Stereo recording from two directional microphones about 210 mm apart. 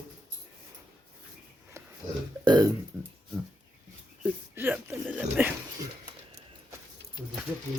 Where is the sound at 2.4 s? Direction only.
20° right (ahead or behind).